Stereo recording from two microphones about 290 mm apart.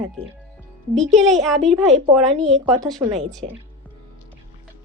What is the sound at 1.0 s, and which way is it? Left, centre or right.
Speech, centre.